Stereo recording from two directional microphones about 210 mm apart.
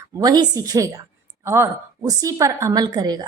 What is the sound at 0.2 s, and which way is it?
A woman's voice, 15° right (ahead or behind).